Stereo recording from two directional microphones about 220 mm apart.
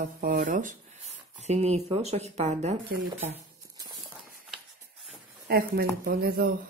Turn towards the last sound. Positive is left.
turn(degrees=-45)  # may be behind; listen again after turning